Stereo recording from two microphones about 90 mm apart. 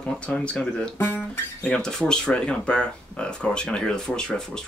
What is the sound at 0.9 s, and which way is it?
Speech, 25° left (ahead or behind).